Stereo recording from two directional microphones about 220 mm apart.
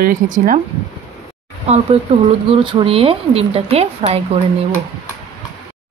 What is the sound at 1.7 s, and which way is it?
Speech, 30° right (ahead or behind).